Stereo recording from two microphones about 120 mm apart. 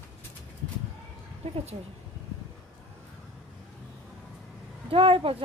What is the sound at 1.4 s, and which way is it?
Speech, 55° right (ahead or behind).